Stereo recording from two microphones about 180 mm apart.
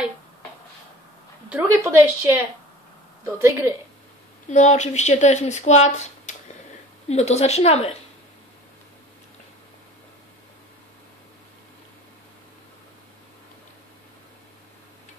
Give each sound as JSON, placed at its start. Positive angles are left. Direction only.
{"t": 1.5, "sound": "speech", "side_deg": -15}
{"t": 4.5, "sound": "speech", "side_deg": 40}